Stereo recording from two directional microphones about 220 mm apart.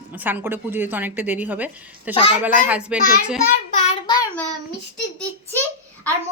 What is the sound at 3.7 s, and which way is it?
Child singing, 35° left (ahead or behind).